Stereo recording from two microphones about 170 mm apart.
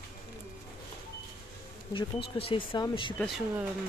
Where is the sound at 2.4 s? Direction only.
30° left (ahead or behind).